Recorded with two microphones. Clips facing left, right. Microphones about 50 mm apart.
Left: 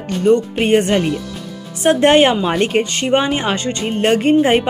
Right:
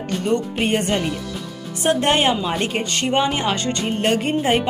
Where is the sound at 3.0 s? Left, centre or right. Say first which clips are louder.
Even; left.